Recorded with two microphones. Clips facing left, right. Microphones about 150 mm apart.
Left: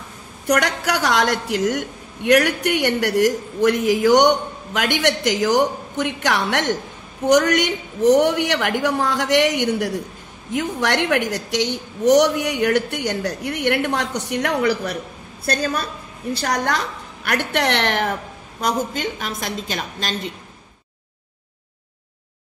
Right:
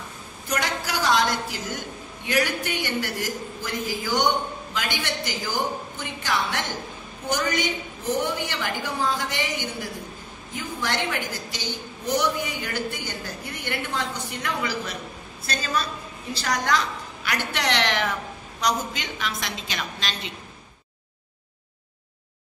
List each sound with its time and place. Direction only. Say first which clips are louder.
0.5 s a woman's voice: left 8 dB; 70° left (ahead or behind); by 20.3 s 50° left (ahead or behind)